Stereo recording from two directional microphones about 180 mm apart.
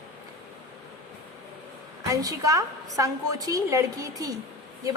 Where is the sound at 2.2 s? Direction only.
20° right (ahead or behind).